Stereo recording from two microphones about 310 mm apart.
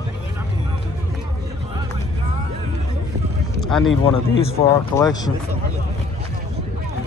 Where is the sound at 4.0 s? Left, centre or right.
Centre.